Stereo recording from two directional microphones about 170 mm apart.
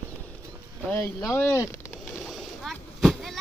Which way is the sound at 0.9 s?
15° left (ahead or behind).